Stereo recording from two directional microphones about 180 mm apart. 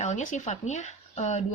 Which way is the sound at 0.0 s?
40° left (ahead or behind).